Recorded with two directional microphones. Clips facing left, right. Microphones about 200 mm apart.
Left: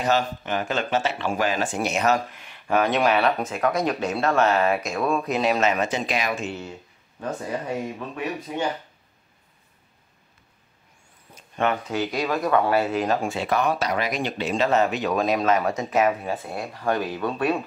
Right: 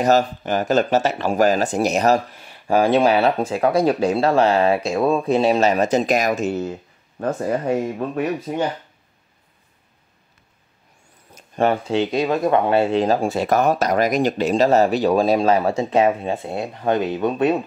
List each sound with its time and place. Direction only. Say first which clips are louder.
0.0 s speech: right 6 dB; 40° right (ahead or behind)
11.3 s speech: right 5 dB; 35° right (ahead or behind)